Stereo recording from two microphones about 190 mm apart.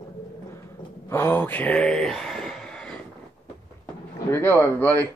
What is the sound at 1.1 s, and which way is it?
Speech, 10° left (ahead or behind).